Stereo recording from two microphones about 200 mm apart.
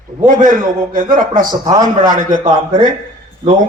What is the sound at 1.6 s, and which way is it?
Speech, 15° right (ahead or behind).